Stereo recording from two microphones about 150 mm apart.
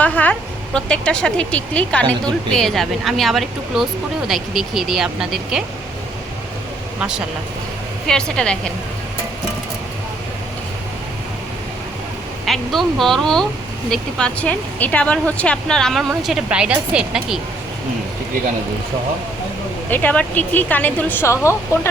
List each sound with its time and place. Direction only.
0.0 s speech: 10° left (ahead or behind)
8.0 s speech: 5° left (ahead or behind)
12.5 s speech: centre (ahead or behind)
19.9 s speech: 10° left (ahead or behind)